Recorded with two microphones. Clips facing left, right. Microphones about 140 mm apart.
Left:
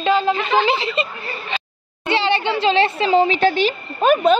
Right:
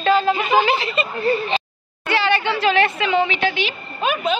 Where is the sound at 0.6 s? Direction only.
25° left (ahead or behind).